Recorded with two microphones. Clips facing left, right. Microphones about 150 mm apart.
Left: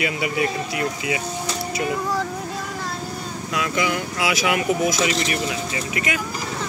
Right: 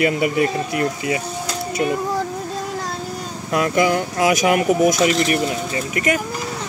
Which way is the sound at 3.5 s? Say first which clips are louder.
Right 6 dB; 50° right (ahead or behind).